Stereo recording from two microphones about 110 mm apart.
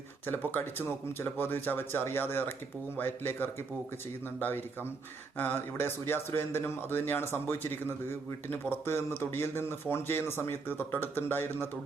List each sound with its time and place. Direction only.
0.3 s a man's voice: 20° left (ahead or behind)